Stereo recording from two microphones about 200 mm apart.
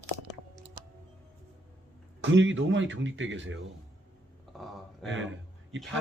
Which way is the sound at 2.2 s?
65° right (ahead or behind).